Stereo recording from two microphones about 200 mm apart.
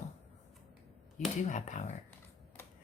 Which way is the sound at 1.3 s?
35° left (ahead or behind).